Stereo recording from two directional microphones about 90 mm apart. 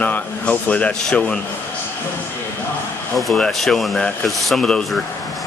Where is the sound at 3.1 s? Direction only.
Centre (ahead or behind).